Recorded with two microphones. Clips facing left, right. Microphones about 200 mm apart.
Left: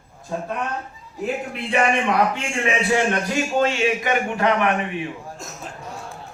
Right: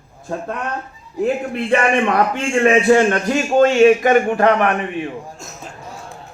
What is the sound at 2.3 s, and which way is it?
A man's voice, 55° right (ahead or behind).